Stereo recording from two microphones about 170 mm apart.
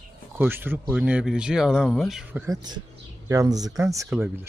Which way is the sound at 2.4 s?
20° right (ahead or behind).